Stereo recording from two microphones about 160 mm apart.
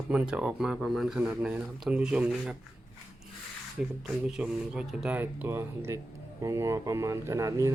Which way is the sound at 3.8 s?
5° right (ahead or behind).